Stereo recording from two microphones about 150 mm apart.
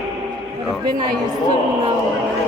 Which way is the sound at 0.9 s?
25° right (ahead or behind).